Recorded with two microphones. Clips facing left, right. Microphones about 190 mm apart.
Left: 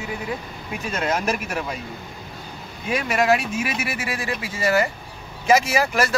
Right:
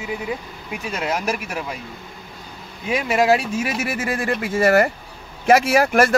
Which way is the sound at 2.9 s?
25° right (ahead or behind).